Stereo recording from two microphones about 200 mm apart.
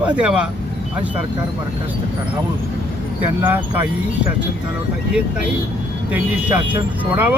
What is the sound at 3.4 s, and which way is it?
Speech, 10° right (ahead or behind).